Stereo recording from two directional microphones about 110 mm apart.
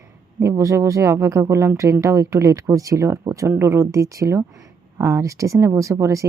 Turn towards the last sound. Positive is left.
turn(degrees=-25)  # may be behind; listen again after turning